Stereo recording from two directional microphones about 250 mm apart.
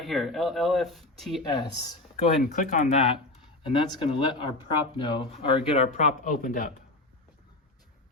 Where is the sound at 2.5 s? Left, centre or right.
Left.